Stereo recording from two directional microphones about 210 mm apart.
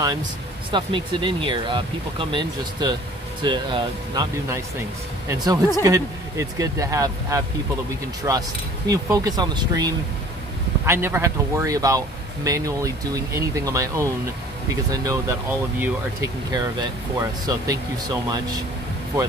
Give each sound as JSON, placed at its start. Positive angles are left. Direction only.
{"t": 0.7, "sound": "speech", "side_deg": -20}